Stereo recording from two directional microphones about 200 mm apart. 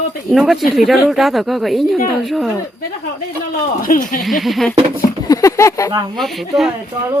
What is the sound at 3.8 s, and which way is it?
Speech, 45° left (ahead or behind).